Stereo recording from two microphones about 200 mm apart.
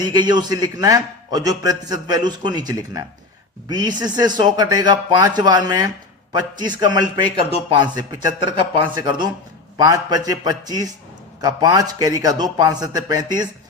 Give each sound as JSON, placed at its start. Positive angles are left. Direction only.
{"t": 0.0, "sound": "a man's voice", "side_deg": -20}